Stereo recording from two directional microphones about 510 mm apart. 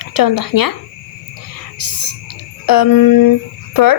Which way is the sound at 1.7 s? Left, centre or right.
Left.